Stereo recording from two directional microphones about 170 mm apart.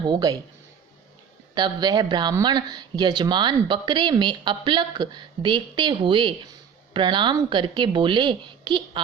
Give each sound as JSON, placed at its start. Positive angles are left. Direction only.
{"t": 0.0, "sound": "speech", "side_deg": -25}
{"t": 1.5, "sound": "speech", "side_deg": -25}